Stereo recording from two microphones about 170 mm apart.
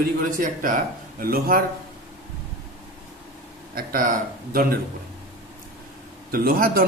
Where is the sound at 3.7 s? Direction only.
55° right (ahead or behind).